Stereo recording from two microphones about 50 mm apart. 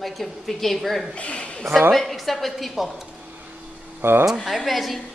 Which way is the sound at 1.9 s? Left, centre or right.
Centre.